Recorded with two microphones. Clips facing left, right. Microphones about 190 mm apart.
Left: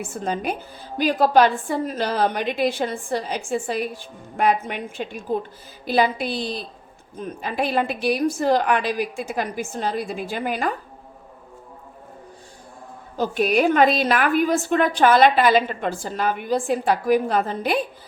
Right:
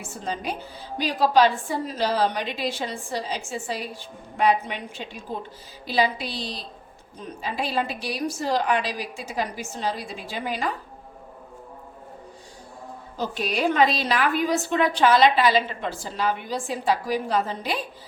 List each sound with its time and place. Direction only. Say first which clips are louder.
0.0 s a woman's voice: left 5 dB; 55° left (ahead or behind)
13.1 s a woman's voice: left 7 dB; 55° left (ahead or behind)